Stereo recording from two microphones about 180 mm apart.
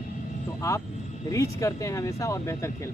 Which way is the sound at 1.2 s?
15° left (ahead or behind).